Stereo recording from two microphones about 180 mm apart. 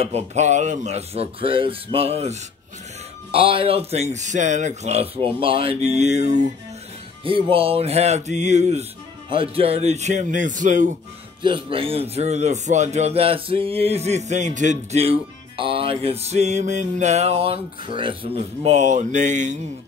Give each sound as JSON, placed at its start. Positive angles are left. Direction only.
{"t": 0.0, "sound": "speech", "side_deg": -40}
{"t": 7.2, "sound": "speech", "side_deg": -30}
{"t": 11.4, "sound": "speech", "side_deg": -30}